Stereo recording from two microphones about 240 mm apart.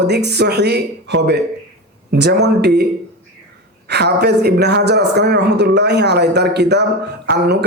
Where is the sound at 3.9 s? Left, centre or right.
Right.